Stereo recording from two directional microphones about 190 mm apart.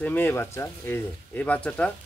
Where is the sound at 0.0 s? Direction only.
10° left (ahead or behind).